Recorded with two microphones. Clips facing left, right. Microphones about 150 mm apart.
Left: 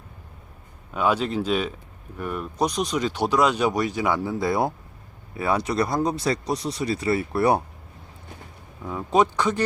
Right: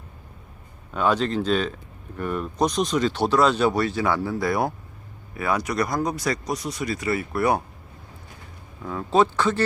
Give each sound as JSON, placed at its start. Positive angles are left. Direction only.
{"t": 0.9, "sound": "speech", "side_deg": 10}
{"t": 8.8, "sound": "speech", "side_deg": 15}